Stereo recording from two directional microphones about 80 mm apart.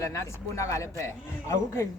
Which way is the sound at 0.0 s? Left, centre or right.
Left.